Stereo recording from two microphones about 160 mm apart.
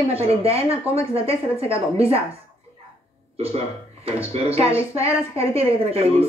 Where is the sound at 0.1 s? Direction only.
40° right (ahead or behind).